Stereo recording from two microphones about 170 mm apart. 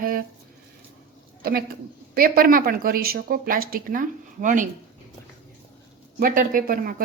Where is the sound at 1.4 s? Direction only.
60° right (ahead or behind).